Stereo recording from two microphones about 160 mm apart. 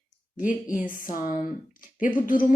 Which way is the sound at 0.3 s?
55° left (ahead or behind).